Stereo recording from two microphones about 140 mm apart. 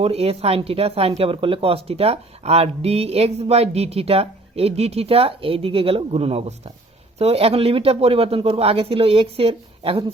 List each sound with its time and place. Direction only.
0.0 s speech: 45° right (ahead or behind)